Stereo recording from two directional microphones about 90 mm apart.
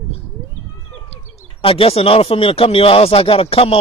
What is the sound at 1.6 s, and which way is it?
Speech, 85° left.